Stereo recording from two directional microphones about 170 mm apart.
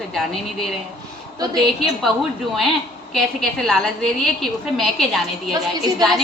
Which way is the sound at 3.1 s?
Centre (ahead or behind).